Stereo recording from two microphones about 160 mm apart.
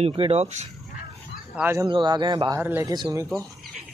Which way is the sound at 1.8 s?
30° right (ahead or behind).